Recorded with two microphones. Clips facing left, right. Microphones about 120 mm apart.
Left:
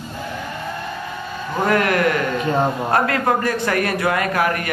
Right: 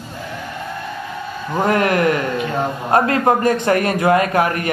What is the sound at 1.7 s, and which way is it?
A man's voice, 30° right (ahead or behind).